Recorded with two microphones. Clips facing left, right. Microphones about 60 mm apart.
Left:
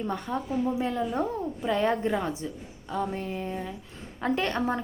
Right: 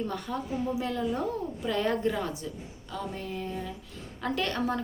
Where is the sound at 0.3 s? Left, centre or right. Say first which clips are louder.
Left 5 dB; left.